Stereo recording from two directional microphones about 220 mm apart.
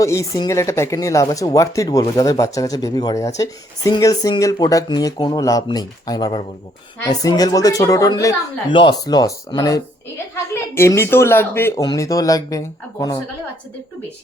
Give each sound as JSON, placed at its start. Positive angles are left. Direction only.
{"t": 0.0, "sound": "speech", "side_deg": 15}